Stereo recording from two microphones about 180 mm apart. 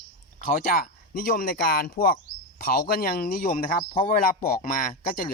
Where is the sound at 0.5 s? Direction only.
50° left (ahead or behind).